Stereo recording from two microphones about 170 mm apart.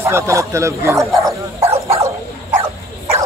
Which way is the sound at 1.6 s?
35° right (ahead or behind).